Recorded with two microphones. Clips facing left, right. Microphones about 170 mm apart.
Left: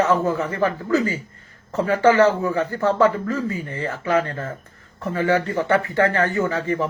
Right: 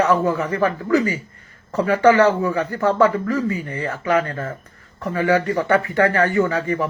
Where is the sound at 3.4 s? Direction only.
20° right (ahead or behind).